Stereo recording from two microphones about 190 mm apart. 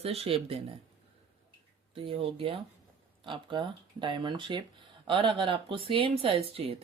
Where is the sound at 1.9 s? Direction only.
30° right (ahead or behind).